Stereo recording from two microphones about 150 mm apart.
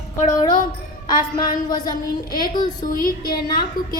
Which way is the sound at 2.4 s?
30° left (ahead or behind).